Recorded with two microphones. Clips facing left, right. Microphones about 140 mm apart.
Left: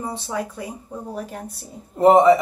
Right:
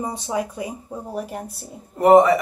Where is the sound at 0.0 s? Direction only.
15° right (ahead or behind).